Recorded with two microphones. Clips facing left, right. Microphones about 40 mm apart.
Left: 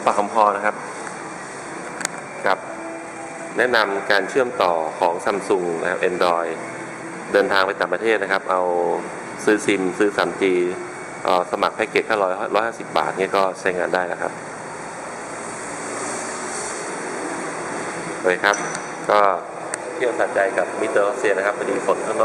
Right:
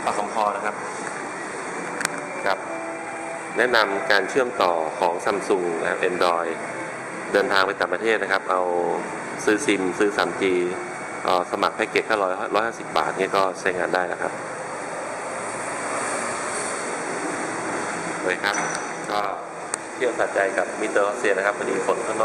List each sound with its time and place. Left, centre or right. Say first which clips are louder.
0.1 s speech: left 7 dB; centre
2.4 s speech: left 4 dB; centre
3.5 s speech: left 2 dB; centre
18.3 s speech: left 6 dB; centre
19.1 s speech: left 10 dB; left
20.0 s speech: left 2 dB; centre